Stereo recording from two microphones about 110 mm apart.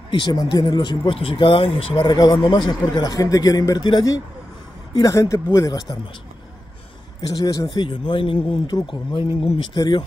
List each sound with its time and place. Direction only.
0.1 s speech: 45° left (ahead or behind)
2.1 s a man's voice: 45° left (ahead or behind)
7.2 s a man's voice: 35° left (ahead or behind)
7.6 s speech: 45° left (ahead or behind)